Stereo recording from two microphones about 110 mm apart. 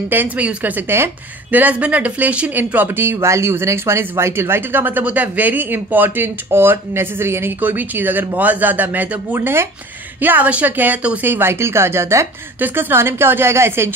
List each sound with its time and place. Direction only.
0.1 s a woman's voice: 15° right (ahead or behind)